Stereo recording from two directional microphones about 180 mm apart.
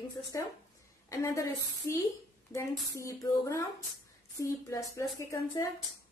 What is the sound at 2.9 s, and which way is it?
A woman's voice, 15° left (ahead or behind).